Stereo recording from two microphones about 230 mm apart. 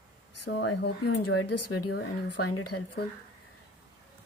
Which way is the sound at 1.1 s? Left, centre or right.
Left.